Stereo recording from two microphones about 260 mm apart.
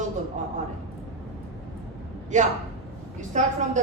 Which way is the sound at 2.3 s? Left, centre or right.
Right.